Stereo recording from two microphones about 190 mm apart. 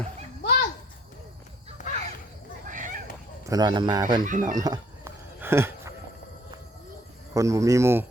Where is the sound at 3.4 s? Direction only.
20° right (ahead or behind).